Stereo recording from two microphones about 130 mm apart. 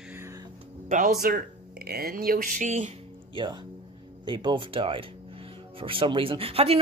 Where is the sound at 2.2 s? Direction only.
90° right; by 3.0 s 65° right (ahead or behind).